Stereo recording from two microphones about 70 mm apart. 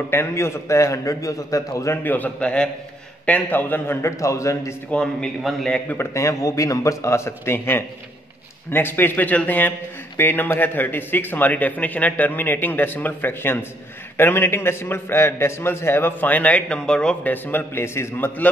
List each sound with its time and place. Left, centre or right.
0.1 s a man's voice: left
2.0 s a man's voice: left
4.2 s a man's voice: left
4.9 s a man's voice: centre
5.4 s a man's voice: centre
5.9 s a man's voice: left; by 17.2 s centre
17.2 s a man's voice: left